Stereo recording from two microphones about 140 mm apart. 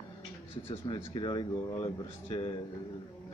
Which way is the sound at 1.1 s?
35° left (ahead or behind).